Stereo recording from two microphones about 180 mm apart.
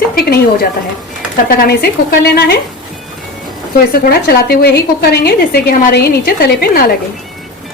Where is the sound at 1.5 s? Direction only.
55° left (ahead or behind).